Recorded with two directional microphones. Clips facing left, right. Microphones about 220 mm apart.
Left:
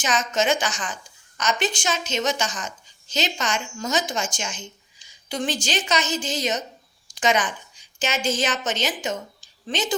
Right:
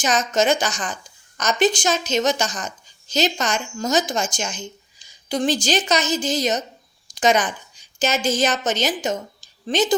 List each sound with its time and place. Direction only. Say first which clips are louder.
0.0 s a woman's voice: right 4 dB; 40° right (ahead or behind)